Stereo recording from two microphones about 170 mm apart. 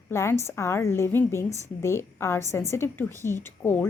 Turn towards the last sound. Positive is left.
turn(degrees=15)  # may be behind; listen again after turning